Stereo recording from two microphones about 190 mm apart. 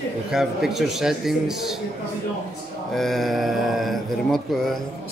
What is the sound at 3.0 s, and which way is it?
Speech, centre (ahead or behind).